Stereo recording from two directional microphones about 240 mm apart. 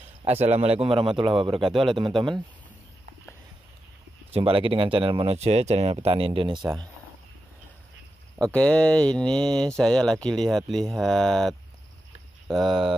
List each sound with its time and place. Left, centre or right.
0.2 s speech: right
4.3 s speech: right
8.5 s speech: centre